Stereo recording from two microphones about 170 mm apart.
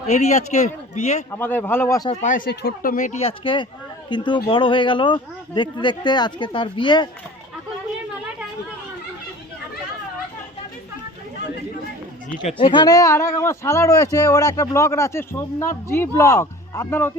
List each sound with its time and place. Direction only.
0.1 s a man's voice: 40° left (ahead or behind)
1.4 s speech: 10° left (ahead or behind)
2.2 s speech: 50° left (ahead or behind)
2.5 s speech: 75° left (ahead or behind)
2.9 s a man's voice: 45° left (ahead or behind); by 7.1 s 25° left (ahead or behind)
12.5 s speech: 30° left (ahead or behind); by 17.1 s 15° left (ahead or behind)